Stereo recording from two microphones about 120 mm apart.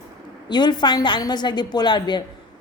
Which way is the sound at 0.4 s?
40° left (ahead or behind).